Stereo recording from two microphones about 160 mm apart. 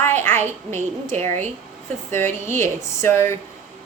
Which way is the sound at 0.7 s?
50° right (ahead or behind).